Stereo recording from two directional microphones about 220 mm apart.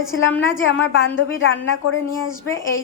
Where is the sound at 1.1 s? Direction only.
60° left (ahead or behind).